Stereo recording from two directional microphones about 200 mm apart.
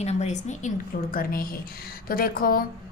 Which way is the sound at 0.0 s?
35° left (ahead or behind).